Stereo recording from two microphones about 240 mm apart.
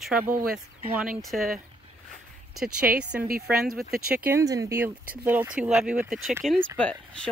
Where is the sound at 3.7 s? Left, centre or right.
Right.